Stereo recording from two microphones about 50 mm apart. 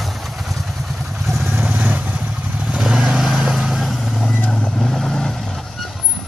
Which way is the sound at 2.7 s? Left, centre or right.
Centre.